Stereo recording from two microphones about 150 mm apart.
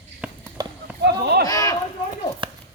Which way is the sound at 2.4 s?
35° right (ahead or behind).